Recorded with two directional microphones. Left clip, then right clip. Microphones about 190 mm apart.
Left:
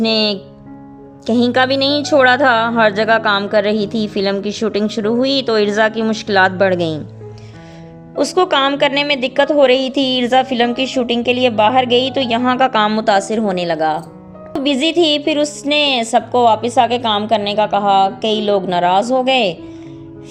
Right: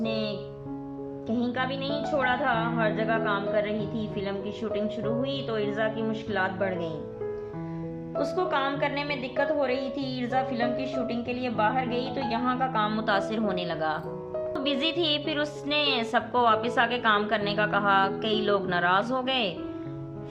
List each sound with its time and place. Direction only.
0.0 s a woman's voice: 55° left (ahead or behind)
8.2 s a woman's voice: 50° left (ahead or behind); by 19.5 s 30° left (ahead or behind)